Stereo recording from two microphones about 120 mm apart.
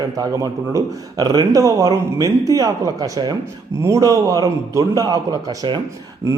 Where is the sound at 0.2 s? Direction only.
30° right (ahead or behind).